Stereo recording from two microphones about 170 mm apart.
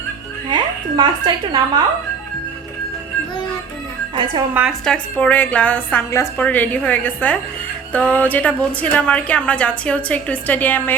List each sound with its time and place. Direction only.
0.5 s speech: 25° right (ahead or behind)
4.1 s speech: 30° right (ahead or behind)
4.9 s a woman's voice: 5° left (ahead or behind)